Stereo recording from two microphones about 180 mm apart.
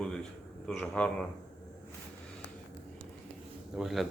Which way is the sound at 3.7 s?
Centre (ahead or behind).